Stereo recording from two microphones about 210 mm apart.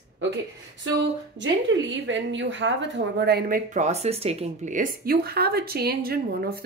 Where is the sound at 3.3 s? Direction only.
45° right (ahead or behind).